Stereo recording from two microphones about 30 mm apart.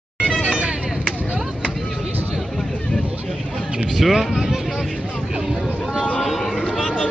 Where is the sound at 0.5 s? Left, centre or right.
Right.